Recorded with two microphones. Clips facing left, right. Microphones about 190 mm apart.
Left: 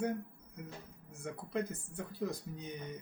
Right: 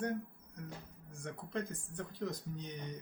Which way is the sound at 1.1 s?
5° left (ahead or behind).